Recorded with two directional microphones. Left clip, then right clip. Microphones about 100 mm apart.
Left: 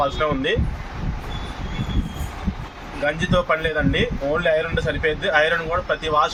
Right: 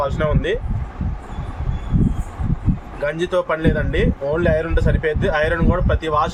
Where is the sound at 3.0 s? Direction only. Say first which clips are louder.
Right 1 dB; 90° right.